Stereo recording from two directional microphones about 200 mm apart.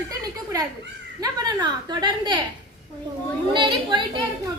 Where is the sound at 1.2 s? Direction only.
20° right (ahead or behind).